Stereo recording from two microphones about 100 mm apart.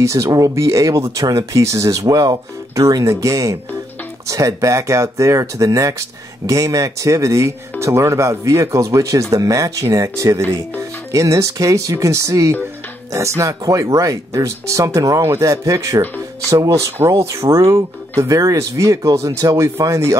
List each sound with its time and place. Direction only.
0.0 s speech: 30° right (ahead or behind)